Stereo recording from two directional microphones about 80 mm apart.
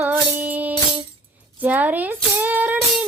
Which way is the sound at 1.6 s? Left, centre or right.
Right.